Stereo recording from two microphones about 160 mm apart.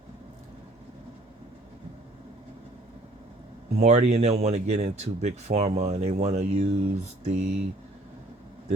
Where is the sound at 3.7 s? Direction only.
45° right (ahead or behind).